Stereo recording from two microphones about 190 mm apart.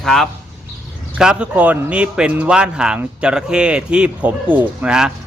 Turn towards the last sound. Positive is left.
turn(degrees=-5)  # may be behind; listen again after turning